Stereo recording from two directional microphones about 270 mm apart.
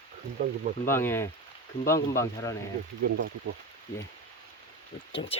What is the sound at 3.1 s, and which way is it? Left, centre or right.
Speech, right.